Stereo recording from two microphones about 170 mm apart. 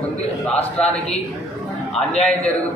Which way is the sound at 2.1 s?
40° left (ahead or behind).